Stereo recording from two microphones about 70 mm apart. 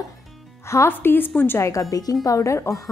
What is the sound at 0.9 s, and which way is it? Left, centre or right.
Speech, left.